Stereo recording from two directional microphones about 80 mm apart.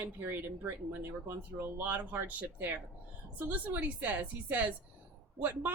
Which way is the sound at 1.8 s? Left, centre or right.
Right.